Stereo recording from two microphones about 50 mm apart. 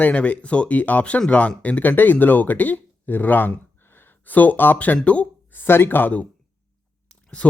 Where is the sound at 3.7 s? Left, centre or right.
Left.